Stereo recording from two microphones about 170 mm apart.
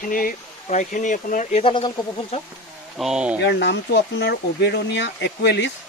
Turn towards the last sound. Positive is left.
turn(degrees=90)